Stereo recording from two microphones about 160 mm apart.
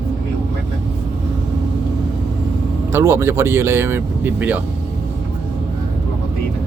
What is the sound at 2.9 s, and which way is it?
Speech, 15° right (ahead or behind).